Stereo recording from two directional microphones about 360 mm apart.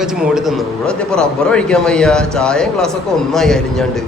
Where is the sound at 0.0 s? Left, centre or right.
Centre.